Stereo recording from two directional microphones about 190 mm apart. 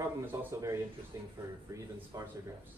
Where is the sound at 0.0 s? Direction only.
15° right (ahead or behind).